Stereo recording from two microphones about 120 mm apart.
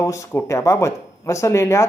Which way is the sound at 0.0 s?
25° left (ahead or behind).